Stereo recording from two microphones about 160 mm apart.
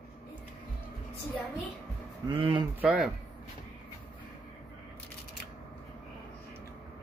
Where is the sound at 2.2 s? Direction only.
30° right (ahead or behind).